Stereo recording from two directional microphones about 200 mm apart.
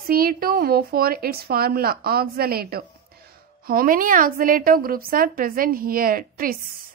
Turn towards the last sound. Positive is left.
turn(degrees=-45)  # may be behind; listen again after turning